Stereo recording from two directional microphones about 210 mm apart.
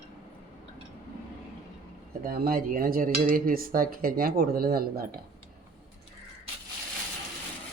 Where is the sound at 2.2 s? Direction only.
45° right (ahead or behind).